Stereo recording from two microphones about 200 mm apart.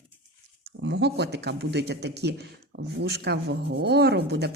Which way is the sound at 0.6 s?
55° right (ahead or behind).